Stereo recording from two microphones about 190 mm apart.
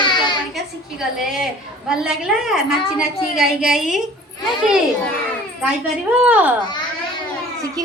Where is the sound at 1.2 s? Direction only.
Centre (ahead or behind).